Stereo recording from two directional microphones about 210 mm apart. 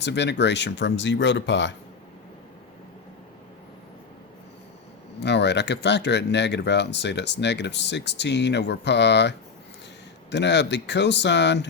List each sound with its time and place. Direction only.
0.0 s speech: 55° left (ahead or behind)
5.2 s speech: 55° left (ahead or behind)
10.3 s speech: 55° left (ahead or behind)